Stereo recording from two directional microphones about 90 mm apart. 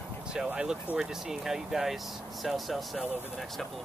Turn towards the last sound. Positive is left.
turn(degrees=0)  # may be behind; listen again after turning